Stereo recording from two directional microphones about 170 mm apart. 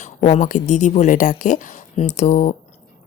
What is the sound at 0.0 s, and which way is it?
Speech, 45° left (ahead or behind).